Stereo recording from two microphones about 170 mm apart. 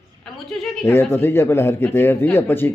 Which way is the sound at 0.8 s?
15° left (ahead or behind).